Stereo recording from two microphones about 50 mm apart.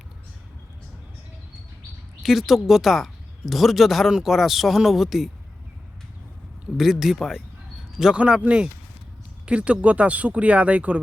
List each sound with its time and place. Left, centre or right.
2.2 s speech: centre
6.7 s speech: centre
8.1 s speech: right